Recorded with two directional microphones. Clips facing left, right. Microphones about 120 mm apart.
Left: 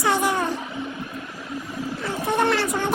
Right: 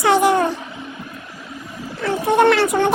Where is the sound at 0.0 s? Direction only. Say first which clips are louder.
Right 7 dB; 80° right.